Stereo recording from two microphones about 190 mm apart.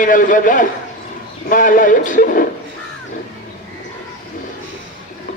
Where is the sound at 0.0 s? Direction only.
45° left (ahead or behind).